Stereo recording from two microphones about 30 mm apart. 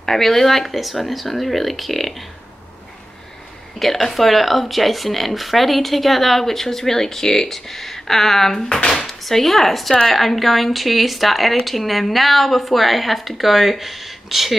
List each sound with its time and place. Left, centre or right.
0.0 s speech: centre
3.8 s speech: centre; by 9.0 s left
9.0 s speech: centre